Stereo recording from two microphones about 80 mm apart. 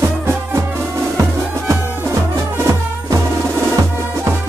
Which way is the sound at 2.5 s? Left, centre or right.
Right.